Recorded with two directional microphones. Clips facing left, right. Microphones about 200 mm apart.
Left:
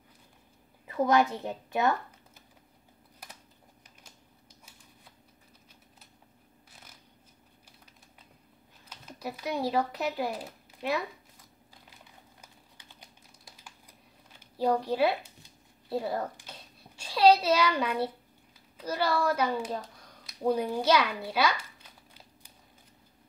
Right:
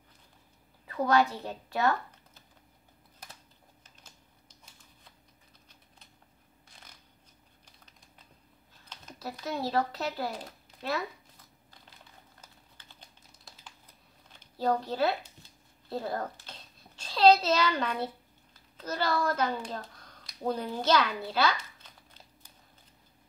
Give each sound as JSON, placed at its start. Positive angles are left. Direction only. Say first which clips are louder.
{"t": 0.8, "sound": "speech", "louder": "left 1 dB", "side_deg": 20}
{"t": 4.0, "sound": "typing", "louder": "left 2 dB", "side_deg": 10}
{"t": 8.8, "sound": "speech", "louder": "left 2 dB", "side_deg": 10}
{"t": 12.4, "sound": "typing", "louder": "left 1 dB", "side_deg": 15}
{"t": 14.3, "sound": "a sound", "louder": "left 2 dB", "side_deg": 10}
{"t": 18.8, "sound": "speech", "louder": "left 2 dB", "side_deg": 10}